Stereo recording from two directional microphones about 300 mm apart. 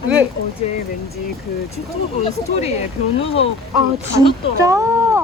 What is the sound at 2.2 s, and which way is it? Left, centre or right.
Speech, left.